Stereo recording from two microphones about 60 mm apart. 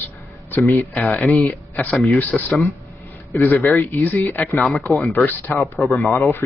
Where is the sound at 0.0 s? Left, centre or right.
Left.